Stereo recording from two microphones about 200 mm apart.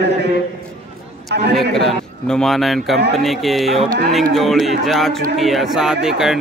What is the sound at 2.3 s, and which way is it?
Speech, centre (ahead or behind).